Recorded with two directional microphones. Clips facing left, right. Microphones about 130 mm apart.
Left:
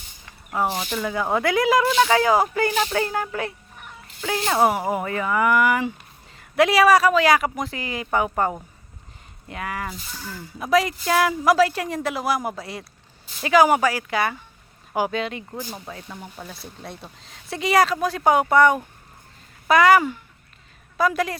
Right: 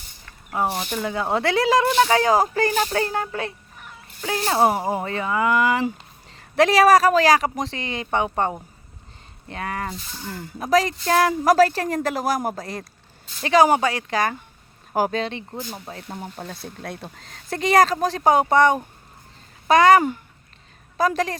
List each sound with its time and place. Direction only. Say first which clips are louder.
0.5 s speech: even; 25° right (ahead or behind)
6.6 s speech: right 1 dB; 40° right (ahead or behind)
10.2 s speech: right 1 dB; 55° right (ahead or behind); by 15.4 s 30° right (ahead or behind)
16.0 s speech: right 4 dB; 45° right (ahead or behind)